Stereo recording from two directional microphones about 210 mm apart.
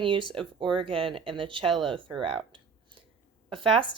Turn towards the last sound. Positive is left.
turn(degrees=-25)  # may be behind; listen again after turning